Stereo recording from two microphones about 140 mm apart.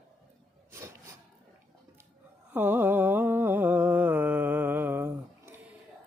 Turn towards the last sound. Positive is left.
turn(degrees=-15)  # may be behind; listen again after turning